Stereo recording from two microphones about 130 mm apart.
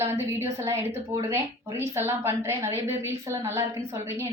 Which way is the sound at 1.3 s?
20° right (ahead or behind).